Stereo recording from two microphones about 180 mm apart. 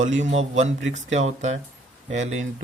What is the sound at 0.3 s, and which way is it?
Speech, 40° right (ahead or behind).